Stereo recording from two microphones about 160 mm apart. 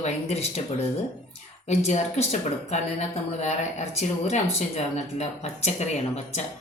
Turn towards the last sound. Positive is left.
turn(degrees=45)  # may be behind; listen again after turning